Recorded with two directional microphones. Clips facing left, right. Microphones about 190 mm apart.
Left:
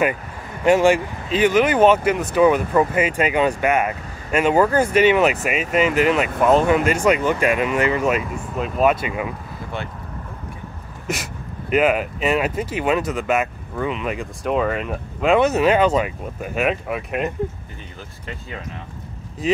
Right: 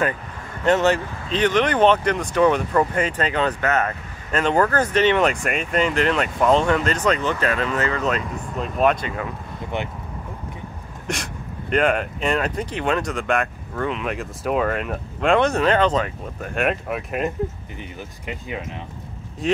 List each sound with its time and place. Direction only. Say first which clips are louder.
0.7 s speech: left 3 dB; 10° left (ahead or behind)
9.7 s speech: right 3 dB; 20° right (ahead or behind)
11.1 s speech: left 1 dB; 5° left (ahead or behind)
18.2 s speech: right 3 dB; 15° right (ahead or behind)
19.4 s speech: left 1 dB; centre (ahead or behind)